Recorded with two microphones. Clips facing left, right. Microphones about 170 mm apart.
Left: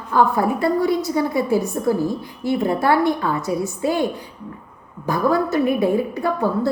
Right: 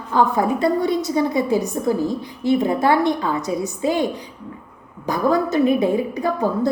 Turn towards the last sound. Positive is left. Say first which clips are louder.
# even
turn(degrees=-15)  # may be behind; listen again after turning